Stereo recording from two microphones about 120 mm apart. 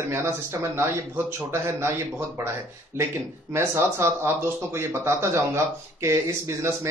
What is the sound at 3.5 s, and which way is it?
Speech, 20° right (ahead or behind).